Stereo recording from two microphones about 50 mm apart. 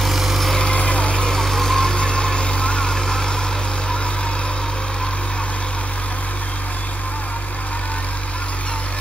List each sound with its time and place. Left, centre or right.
0.0 s vehicle: centre
0.7 s vehicle: left